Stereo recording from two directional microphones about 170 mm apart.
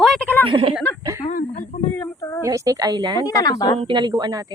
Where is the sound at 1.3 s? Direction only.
50° left (ahead or behind).